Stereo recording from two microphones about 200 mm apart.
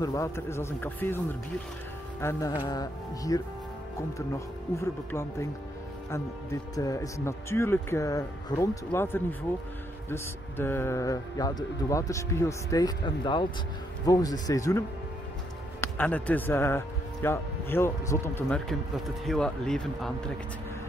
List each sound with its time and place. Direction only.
0.0 s speech: 15° left (ahead or behind)
4.7 s speech: 15° left (ahead or behind)
6.7 s a man's voice: 15° left (ahead or behind)